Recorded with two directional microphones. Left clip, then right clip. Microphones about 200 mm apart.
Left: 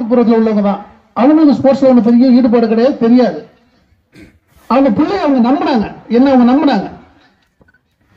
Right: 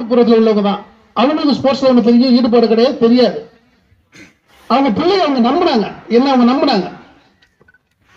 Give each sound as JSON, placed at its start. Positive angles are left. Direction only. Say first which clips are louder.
{"t": 0.0, "sound": "a man's voice", "louder": "right 1 dB", "side_deg": -35}
{"t": 4.1, "sound": "a man's voice", "louder": "right 1 dB", "side_deg": -30}